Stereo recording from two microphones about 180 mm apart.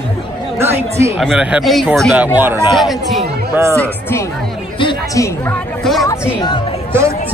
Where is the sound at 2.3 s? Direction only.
10° right (ahead or behind).